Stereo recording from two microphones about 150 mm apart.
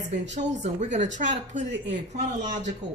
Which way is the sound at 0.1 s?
50° right (ahead or behind).